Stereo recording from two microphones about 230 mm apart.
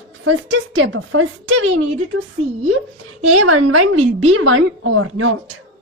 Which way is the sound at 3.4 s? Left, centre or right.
Right.